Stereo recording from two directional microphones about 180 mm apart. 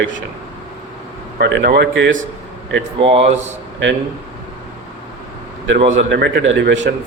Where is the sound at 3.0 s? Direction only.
35° right (ahead or behind).